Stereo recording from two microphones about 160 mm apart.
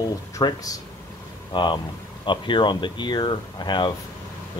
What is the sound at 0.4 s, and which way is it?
Speech, 25° left (ahead or behind).